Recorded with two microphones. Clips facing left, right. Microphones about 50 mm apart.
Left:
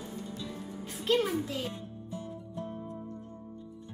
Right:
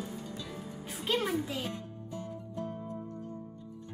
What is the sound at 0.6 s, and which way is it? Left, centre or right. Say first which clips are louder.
Music: left 1 dB; centre.